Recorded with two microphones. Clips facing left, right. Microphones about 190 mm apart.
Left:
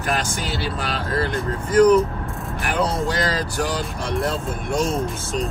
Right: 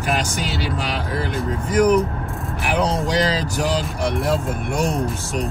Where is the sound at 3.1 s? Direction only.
10° right (ahead or behind).